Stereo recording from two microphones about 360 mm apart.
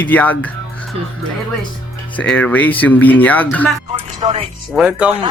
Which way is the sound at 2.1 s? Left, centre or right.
Centre.